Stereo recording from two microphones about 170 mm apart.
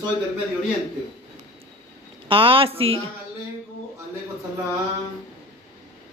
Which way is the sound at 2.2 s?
30° right (ahead or behind).